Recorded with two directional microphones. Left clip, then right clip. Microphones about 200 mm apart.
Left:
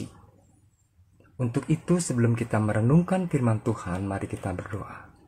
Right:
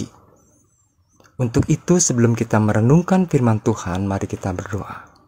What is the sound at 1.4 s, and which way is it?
Speech, 50° right (ahead or behind).